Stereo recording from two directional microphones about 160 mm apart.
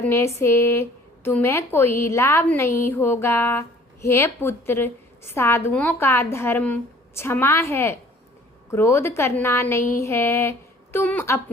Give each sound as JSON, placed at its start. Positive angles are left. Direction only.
{"t": 0.0, "sound": "speech", "side_deg": 15}